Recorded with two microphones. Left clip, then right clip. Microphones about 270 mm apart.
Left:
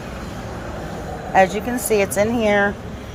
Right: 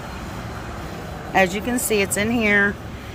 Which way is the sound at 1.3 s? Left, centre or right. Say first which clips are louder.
Left 3 dB; centre.